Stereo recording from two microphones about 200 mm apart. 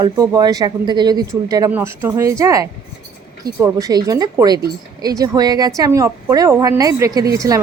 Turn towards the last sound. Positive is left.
turn(degrees=-15)  # may be behind; listen again after turning